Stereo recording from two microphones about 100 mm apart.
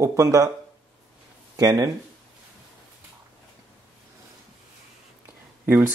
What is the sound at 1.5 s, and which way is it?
Speech, 40° right (ahead or behind).